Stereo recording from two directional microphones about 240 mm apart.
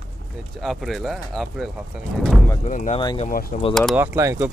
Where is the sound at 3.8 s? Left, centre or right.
Centre.